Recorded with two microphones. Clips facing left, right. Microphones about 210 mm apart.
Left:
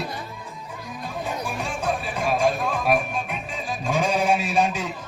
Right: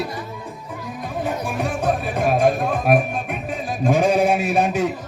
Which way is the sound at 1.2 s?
60° right (ahead or behind).